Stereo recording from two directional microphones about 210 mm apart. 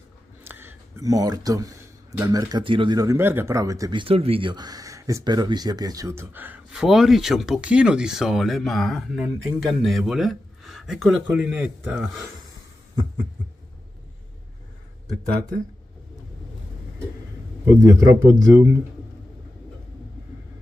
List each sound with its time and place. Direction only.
0.4 s a sound: 10° right (ahead or behind)
2.2 s speech: 20° right (ahead or behind)
17.6 s speech: 15° right (ahead or behind)